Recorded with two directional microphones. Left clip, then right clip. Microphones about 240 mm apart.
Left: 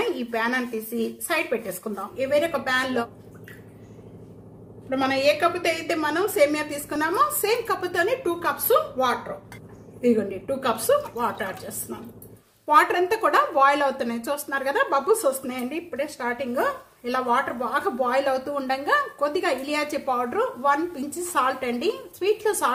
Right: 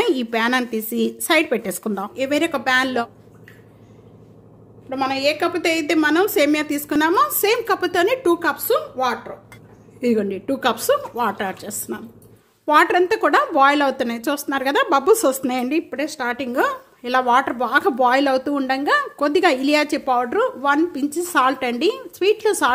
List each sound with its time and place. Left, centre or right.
0.0 s speech: right
4.8 s speech: right